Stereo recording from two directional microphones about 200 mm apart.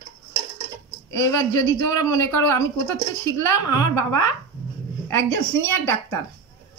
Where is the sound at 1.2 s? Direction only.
15° left (ahead or behind).